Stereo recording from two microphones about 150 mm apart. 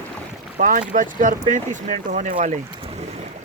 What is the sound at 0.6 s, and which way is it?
Speech, 65° right (ahead or behind).